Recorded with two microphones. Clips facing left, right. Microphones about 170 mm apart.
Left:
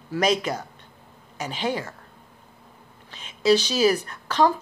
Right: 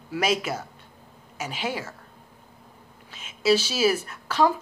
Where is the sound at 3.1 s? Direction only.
5° right (ahead or behind).